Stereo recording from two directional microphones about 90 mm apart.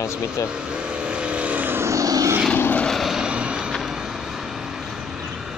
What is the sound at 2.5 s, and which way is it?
Vehicle, 25° left (ahead or behind).